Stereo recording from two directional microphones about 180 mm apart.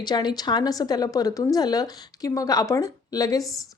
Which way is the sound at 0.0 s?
25° left (ahead or behind).